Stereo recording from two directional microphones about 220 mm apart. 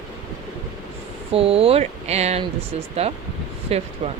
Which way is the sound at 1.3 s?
25° right (ahead or behind).